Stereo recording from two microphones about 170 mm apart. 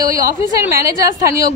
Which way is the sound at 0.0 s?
20° right (ahead or behind).